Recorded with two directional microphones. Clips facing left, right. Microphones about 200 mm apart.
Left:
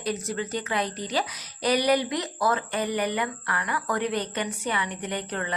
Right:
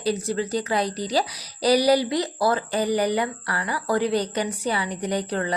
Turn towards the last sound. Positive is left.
turn(degrees=-35)  # may be behind; listen again after turning